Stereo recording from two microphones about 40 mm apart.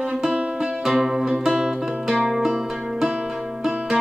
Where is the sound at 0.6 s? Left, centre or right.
Centre.